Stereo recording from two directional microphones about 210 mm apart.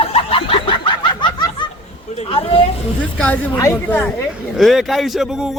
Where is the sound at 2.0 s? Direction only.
30° left (ahead or behind).